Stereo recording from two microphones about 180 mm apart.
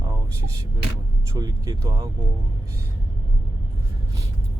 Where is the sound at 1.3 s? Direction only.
20° right (ahead or behind).